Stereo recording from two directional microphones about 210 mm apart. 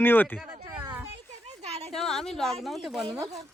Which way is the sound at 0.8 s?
10° right (ahead or behind).